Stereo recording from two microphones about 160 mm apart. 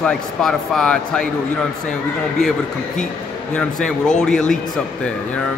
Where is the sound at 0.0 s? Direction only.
5° left (ahead or behind).